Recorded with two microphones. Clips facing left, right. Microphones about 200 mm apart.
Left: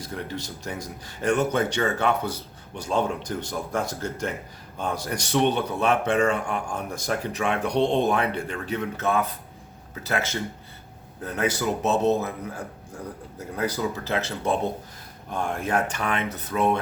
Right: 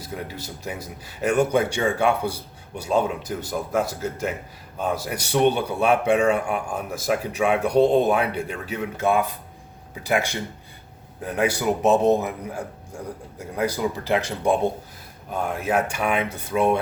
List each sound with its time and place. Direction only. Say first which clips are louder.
0.0 s speech: even; 5° right (ahead or behind)
13.6 s speech: right 3 dB; 10° right (ahead or behind)